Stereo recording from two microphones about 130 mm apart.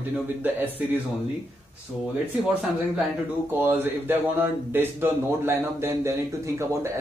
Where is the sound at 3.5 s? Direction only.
15° right (ahead or behind).